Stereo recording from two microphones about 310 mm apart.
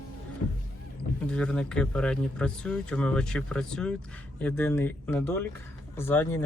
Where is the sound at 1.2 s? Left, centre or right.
Centre.